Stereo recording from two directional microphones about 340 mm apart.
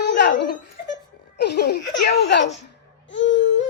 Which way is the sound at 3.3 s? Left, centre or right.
Left.